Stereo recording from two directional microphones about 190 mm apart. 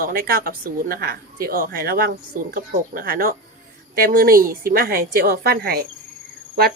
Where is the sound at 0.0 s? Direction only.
50° right (ahead or behind).